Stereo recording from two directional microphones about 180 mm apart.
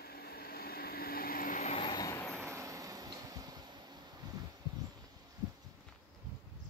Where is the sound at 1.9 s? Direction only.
20° left (ahead or behind).